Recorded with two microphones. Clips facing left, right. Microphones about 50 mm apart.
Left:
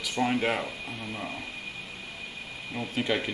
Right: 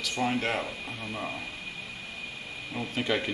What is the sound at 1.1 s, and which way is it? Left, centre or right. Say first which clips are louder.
Speech: right 2 dB; centre.